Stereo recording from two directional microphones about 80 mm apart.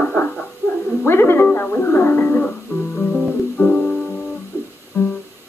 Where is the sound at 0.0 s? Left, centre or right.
Left.